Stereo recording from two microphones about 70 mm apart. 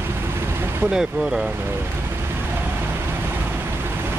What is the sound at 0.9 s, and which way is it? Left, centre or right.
Speech, centre.